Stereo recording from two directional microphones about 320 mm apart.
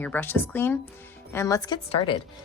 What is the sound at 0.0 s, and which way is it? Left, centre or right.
Speech, centre.